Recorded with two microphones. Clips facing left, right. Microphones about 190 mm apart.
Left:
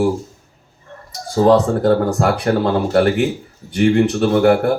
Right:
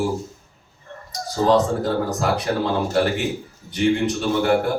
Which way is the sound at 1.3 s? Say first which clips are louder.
Left 5 dB; 60° left (ahead or behind).